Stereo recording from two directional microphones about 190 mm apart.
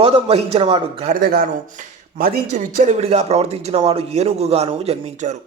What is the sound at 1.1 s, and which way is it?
A man's voice, 50° right (ahead or behind).